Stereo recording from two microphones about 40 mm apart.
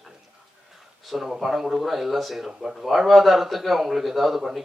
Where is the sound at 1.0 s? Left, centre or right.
Centre.